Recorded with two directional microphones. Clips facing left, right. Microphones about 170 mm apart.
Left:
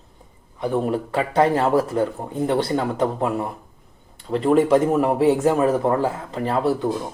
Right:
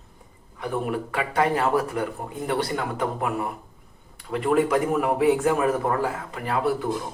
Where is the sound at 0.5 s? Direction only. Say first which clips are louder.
Left 5 dB; 30° left (ahead or behind).